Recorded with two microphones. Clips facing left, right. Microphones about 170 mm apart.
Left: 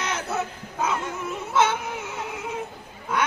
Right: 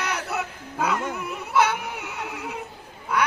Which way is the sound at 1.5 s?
25° left (ahead or behind).